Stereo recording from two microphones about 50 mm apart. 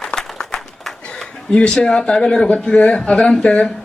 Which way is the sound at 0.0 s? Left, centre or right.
Centre.